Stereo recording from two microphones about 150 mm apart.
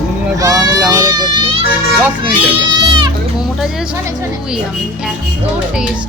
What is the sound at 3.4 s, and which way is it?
Speech, 5° right (ahead or behind).